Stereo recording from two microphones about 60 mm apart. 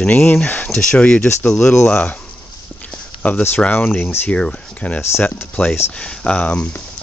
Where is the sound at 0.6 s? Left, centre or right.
Centre.